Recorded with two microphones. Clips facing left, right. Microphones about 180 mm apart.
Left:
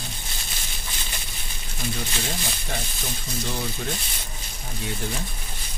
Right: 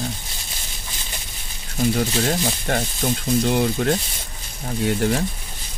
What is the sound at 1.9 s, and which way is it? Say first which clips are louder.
Speech: right 8 dB; 65° right (ahead or behind).